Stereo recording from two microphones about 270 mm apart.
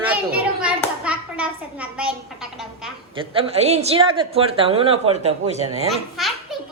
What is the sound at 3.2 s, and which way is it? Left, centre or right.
A woman's voice, right.